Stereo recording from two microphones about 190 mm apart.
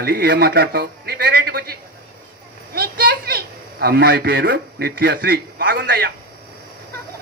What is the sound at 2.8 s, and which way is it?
A man's voice, 50° right (ahead or behind).